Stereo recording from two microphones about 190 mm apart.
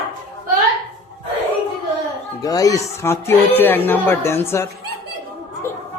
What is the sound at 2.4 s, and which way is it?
Speech, 20° left (ahead or behind).